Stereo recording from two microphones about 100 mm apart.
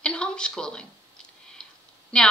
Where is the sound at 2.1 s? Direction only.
10° left (ahead or behind).